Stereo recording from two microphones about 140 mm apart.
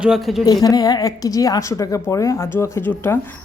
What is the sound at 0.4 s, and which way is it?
A woman's voice, 25° left (ahead or behind).